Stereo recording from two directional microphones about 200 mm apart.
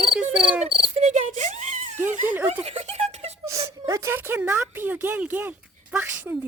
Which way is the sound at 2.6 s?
30° right (ahead or behind).